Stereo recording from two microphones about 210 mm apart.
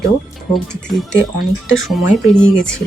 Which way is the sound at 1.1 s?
65° left (ahead or behind).